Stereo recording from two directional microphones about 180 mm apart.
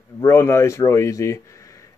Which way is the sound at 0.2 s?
15° left (ahead or behind).